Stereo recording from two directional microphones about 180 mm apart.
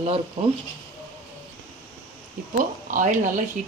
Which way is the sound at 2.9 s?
45° right (ahead or behind).